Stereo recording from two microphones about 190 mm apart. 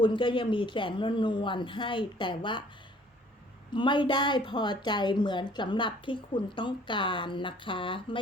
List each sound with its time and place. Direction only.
0.0 s a woman's voice: 25° left (ahead or behind)
3.7 s a woman's voice: 25° left (ahead or behind)